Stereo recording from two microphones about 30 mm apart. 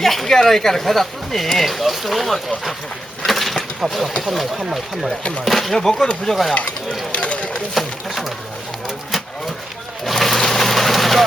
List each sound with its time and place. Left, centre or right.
0.0 s speech: centre
3.2 s a sound: centre
3.8 s speech: centre
5.7 s speech: centre
7.1 s a sound: left
7.7 s speech: centre
10.0 s vehicle: centre